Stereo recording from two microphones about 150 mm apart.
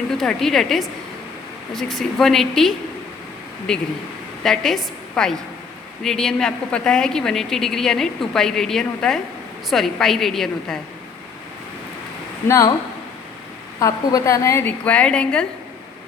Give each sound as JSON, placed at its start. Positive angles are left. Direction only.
{"t": 0.2, "sound": "a woman's voice", "side_deg": 0}
{"t": 12.5, "sound": "speech", "side_deg": 20}
{"t": 13.7, "sound": "a woman's voice", "side_deg": 20}